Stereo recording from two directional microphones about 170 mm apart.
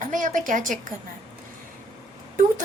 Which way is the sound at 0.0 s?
50° right (ahead or behind).